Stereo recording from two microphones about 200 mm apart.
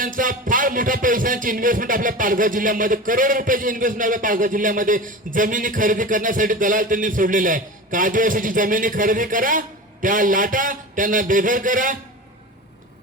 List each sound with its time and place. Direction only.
0.0 s speech: 40° right (ahead or behind)